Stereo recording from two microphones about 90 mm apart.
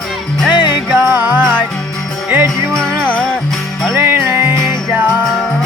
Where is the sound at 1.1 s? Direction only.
20° right (ahead or behind).